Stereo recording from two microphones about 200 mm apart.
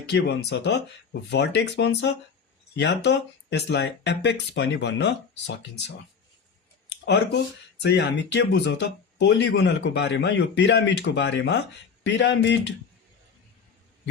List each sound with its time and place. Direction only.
0.1 s speech: 55° left (ahead or behind)
6.9 s a sound: 60° left (ahead or behind)
7.8 s speech: 60° left (ahead or behind)